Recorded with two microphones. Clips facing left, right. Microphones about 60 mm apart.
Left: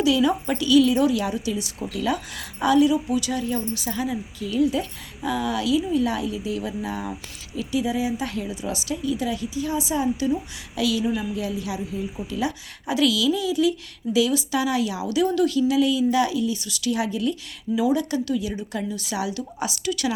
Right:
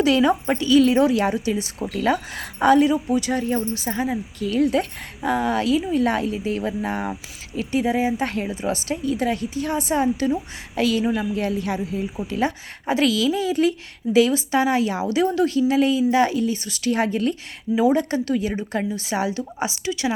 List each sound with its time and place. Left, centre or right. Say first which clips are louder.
0.0 s speech: right 2 dB; right
4.4 s a woman's voice: right 2 dB; right
11.9 s speech: right 3 dB; right
12.3 s a woman's voice: right 4 dB; right
18.9 s a woman's voice: right 4 dB; right